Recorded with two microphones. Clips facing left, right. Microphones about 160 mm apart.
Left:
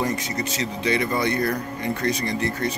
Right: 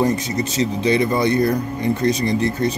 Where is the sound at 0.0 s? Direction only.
25° right (ahead or behind).